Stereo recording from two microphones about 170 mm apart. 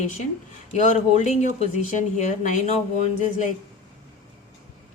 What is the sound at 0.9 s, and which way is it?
Speech, 45° left (ahead or behind).